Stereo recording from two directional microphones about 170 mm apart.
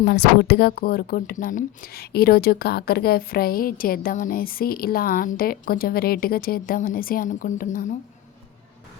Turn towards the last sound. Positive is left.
turn(degrees=55)  # may be behind; listen again after turning